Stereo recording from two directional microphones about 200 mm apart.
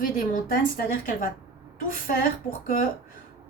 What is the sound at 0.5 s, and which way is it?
A woman's voice, 45° left (ahead or behind).